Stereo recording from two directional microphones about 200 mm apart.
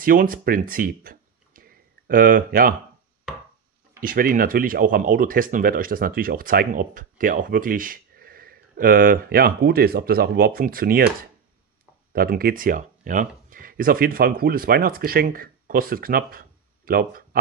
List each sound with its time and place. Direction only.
0.0 s speech: 45° right (ahead or behind)
4.0 s speech: 45° right (ahead or behind)